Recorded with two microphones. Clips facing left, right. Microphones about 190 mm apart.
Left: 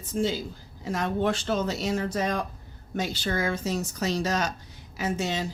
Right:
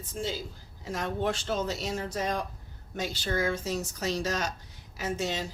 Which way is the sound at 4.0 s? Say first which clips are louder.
Left 4 dB; 75° left (ahead or behind).